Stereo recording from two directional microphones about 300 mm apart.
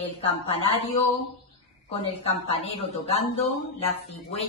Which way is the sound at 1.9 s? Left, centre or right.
Centre.